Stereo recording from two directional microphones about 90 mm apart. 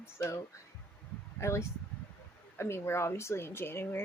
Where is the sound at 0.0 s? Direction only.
30° left (ahead or behind).